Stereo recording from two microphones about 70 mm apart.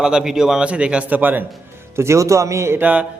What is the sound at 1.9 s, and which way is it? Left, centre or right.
Speech, right.